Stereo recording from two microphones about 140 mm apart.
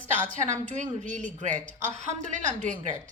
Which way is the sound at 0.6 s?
60° right (ahead or behind).